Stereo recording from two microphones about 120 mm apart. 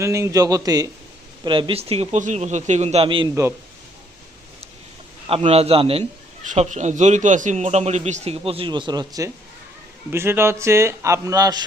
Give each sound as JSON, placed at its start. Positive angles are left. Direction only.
{"t": 0.0, "sound": "a man's voice", "side_deg": -25}
{"t": 1.5, "sound": "a man's voice", "side_deg": -45}
{"t": 2.1, "sound": "a man's voice", "side_deg": -80}
{"t": 3.2, "sound": "a man's voice", "side_deg": -25}
{"t": 5.3, "sound": "a man's voice", "side_deg": -55}
{"t": 6.4, "sound": "a man's voice", "side_deg": -90}
{"t": 10.1, "sound": "a man's voice", "side_deg": -20}